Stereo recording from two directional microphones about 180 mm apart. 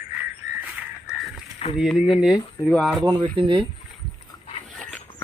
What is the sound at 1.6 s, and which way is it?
Speech, 30° left (ahead or behind).